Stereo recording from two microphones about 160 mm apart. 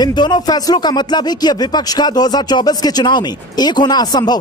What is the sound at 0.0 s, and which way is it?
Speech, 25° left (ahead or behind).